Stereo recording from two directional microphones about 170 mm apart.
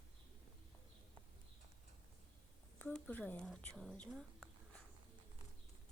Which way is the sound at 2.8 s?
10° left (ahead or behind).